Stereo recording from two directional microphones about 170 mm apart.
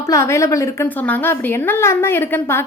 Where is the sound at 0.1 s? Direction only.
15° left (ahead or behind).